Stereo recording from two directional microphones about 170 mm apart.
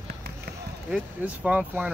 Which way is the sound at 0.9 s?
10° right (ahead or behind).